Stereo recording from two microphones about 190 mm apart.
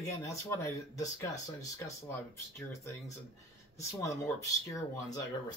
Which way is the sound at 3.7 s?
15° left (ahead or behind).